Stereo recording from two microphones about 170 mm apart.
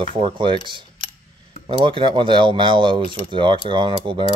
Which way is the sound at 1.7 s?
30° right (ahead or behind).